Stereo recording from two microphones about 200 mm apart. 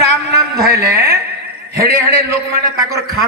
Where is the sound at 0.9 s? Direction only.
50° right (ahead or behind).